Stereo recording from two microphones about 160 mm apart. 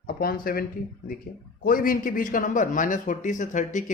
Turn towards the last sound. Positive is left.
turn(degrees=50)  # may be behind; listen again after turning